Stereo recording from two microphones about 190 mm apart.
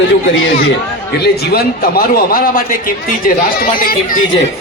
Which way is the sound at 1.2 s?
55° left (ahead or behind).